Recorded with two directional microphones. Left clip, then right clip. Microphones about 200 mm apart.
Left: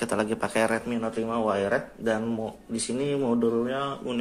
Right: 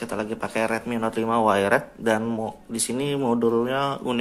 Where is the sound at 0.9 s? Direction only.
20° right (ahead or behind).